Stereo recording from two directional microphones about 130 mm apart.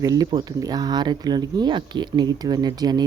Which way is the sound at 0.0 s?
30° right (ahead or behind).